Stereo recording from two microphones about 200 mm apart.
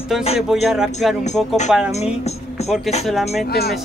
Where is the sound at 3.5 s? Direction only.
50° left (ahead or behind).